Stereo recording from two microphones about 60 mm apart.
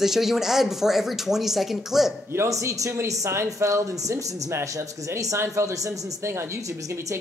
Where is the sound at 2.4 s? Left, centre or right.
Right.